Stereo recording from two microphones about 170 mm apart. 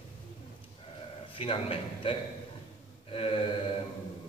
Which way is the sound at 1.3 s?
30° left (ahead or behind).